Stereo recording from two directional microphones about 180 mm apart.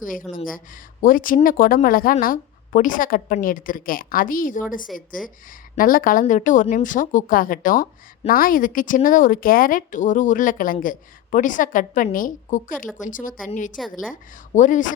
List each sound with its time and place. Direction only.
0.0 s a woman's voice: 50° left (ahead or behind)